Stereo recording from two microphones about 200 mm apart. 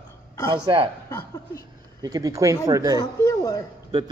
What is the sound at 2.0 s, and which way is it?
Speech, 20° right (ahead or behind).